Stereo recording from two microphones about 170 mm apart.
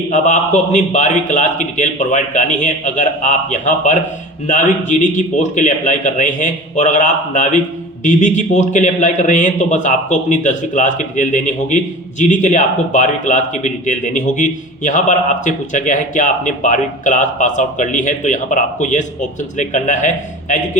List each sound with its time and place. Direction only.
0.1 s speech: 45° left (ahead or behind)